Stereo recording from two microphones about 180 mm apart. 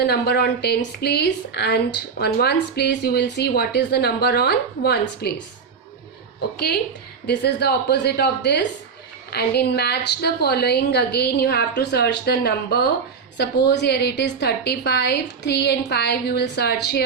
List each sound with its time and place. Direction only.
0.0 s speech: 65° left (ahead or behind)
7.3 s a woman's voice: 65° left (ahead or behind)